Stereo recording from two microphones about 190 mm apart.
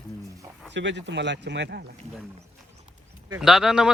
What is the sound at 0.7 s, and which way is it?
Speech, 70° right (ahead or behind).